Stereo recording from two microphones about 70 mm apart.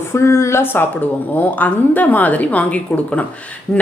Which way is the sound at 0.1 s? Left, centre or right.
Left.